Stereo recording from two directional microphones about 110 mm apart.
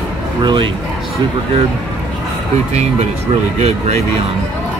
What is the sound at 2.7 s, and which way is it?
Speech, 85° right.